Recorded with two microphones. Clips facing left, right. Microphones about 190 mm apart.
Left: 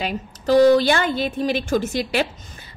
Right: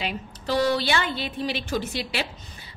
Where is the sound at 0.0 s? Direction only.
45° left (ahead or behind).